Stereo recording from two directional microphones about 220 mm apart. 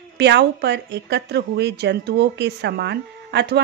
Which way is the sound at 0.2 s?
50° right (ahead or behind).